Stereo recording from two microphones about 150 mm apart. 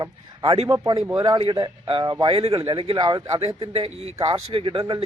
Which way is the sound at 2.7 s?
35° right (ahead or behind).